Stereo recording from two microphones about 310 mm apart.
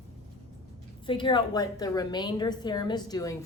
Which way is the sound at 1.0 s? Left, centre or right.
Centre.